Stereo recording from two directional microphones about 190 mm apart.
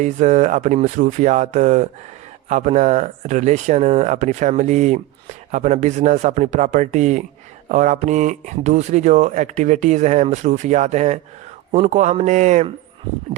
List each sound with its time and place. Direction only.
0.0 s speech: 40° right (ahead or behind)